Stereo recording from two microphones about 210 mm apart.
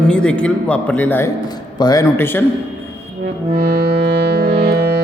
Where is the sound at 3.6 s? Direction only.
45° right (ahead or behind).